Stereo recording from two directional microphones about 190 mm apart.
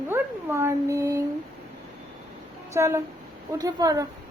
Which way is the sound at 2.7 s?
15° right (ahead or behind).